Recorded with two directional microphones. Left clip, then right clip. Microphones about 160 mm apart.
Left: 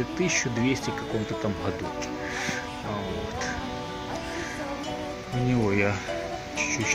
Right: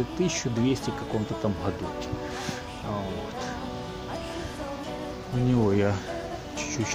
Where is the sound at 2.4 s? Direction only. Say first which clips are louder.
Left 4 dB; 5° right (ahead or behind).